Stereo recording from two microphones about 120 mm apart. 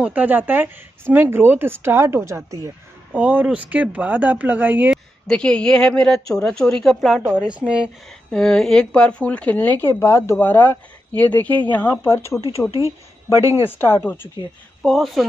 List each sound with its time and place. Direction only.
0.0 s speech: 15° right (ahead or behind)
3.1 s speech: 15° right (ahead or behind)
4.9 s a woman's voice: 5° left (ahead or behind)
7.5 s speech: 10° right (ahead or behind)
8.3 s a woman's voice: 5° left (ahead or behind); by 12.4 s 25° left (ahead or behind)
13.4 s speech: 25° right (ahead or behind)
13.7 s speech: 20° left (ahead or behind)
14.8 s a woman's voice: centre (ahead or behind)